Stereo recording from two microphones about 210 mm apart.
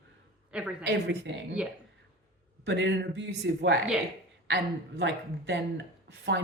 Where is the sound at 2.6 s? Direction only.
55° right (ahead or behind).